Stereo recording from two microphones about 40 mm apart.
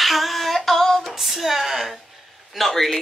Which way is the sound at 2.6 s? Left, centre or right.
Centre.